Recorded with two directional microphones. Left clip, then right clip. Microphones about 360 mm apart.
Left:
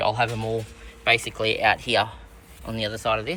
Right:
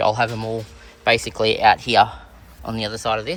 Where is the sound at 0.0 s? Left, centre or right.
Centre.